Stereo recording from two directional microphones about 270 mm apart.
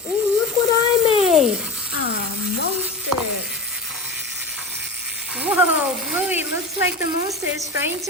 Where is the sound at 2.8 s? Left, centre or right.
Centre.